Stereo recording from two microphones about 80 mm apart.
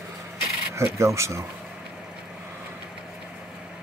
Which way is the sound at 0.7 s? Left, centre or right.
Right.